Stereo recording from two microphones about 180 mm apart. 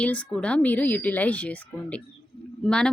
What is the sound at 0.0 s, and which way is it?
Speech, 5° left (ahead or behind).